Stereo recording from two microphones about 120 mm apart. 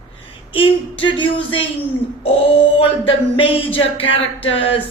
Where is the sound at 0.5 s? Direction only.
45° left (ahead or behind).